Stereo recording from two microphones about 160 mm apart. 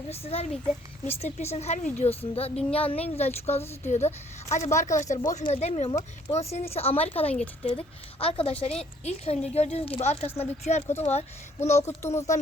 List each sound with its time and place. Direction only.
0.1 s a woman's voice: 40° left (ahead or behind)